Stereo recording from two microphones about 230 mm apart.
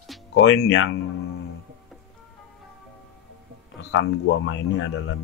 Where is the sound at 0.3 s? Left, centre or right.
Left.